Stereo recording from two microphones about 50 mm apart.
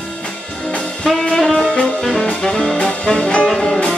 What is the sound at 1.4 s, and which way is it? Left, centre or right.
Saxophone, centre.